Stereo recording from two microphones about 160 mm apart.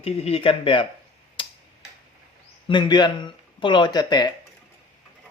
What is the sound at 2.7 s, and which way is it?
Speech, 30° left (ahead or behind).